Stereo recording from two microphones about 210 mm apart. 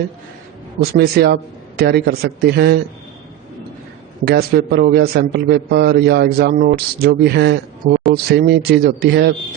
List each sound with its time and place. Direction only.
0.8 s a man's voice: 50° right (ahead or behind)
4.3 s a man's voice: 50° right (ahead or behind)